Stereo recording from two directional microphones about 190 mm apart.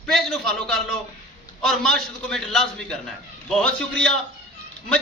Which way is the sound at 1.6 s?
Centre (ahead or behind).